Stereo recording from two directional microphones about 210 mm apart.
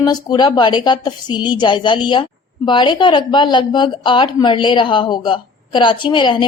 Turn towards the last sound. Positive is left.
turn(degrees=20)  # may be behind; listen again after turning